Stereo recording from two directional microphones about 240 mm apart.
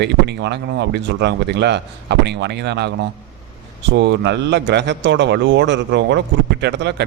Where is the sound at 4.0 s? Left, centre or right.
Right.